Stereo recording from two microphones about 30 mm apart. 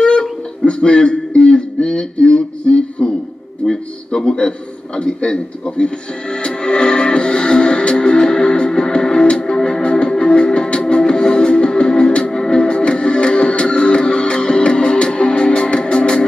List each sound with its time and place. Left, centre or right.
0.0 s a sound: left
3.6 s a man's voice: centre
4.2 s a man's voice: left
6.3 s music: left